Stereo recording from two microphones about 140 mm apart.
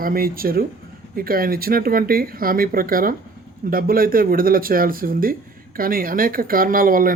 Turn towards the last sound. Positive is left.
turn(degrees=-90)